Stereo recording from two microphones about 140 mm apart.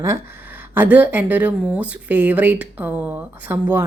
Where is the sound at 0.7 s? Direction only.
10° right (ahead or behind).